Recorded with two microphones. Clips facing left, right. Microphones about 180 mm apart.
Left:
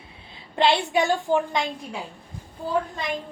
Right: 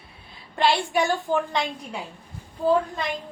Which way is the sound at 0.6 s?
20° left (ahead or behind).